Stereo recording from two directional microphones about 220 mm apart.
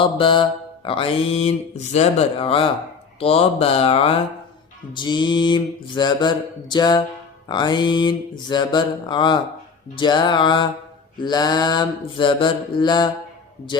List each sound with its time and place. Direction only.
0.0 s mantra: 20° left (ahead or behind)